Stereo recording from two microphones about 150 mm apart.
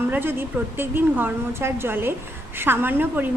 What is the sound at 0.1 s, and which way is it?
A woman's voice, 15° right (ahead or behind).